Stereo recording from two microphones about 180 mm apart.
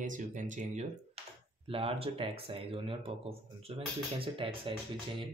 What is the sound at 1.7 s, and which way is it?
Speech, 30° right (ahead or behind).